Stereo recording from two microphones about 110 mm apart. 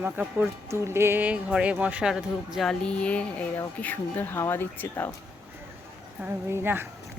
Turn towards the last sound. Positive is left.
turn(degrees=-20)  # may be behind; listen again after turning